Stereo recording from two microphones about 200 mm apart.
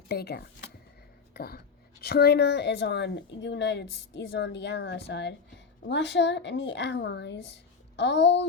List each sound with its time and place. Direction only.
0.1 s a woman's voice: 55° left (ahead or behind)